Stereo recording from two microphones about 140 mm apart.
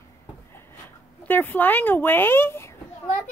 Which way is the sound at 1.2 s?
15° left (ahead or behind).